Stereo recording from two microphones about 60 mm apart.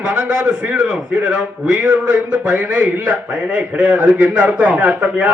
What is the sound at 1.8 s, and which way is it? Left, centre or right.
Speech, right.